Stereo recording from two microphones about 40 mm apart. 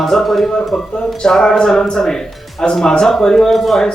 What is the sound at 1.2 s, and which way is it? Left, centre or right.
Speech, centre.